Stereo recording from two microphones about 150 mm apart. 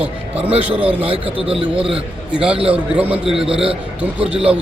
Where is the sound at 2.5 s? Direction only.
40° right (ahead or behind).